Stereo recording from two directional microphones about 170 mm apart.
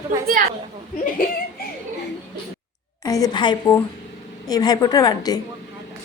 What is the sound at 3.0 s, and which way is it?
A woman's voice, 20° left (ahead or behind).